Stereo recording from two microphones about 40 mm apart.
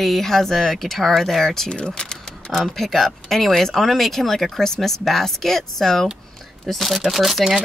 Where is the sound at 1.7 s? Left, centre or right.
Left.